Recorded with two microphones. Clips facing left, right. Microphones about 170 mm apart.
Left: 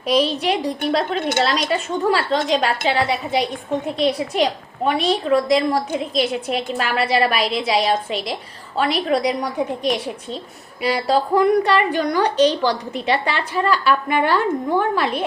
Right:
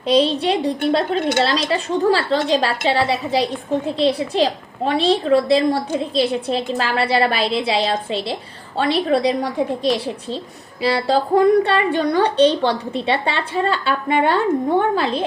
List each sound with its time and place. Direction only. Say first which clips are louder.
0.1 s a woman's voice: right 2 dB; 30° right (ahead or behind)